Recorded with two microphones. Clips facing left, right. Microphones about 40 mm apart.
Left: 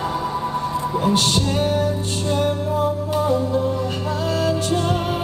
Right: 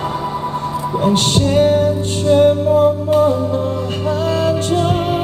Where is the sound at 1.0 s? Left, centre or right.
Right.